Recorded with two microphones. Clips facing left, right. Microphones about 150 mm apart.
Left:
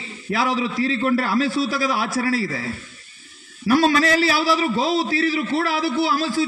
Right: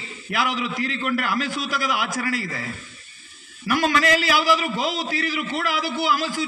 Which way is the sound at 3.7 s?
35° left (ahead or behind).